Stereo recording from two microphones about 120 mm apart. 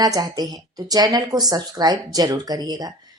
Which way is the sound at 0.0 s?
35° right (ahead or behind).